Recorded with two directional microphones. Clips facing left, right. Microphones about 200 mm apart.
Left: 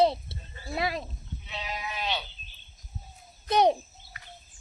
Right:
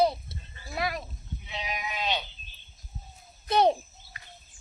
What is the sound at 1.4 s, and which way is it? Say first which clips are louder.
Sheep: right 1 dB; 15° right (ahead or behind).